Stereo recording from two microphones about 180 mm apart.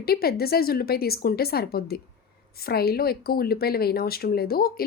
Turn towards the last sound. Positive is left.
turn(degrees=55)  # may be behind; listen again after turning